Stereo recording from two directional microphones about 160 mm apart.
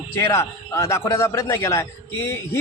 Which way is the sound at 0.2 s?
15° left (ahead or behind).